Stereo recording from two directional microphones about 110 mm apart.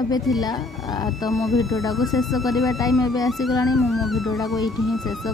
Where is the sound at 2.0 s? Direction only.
Centre (ahead or behind).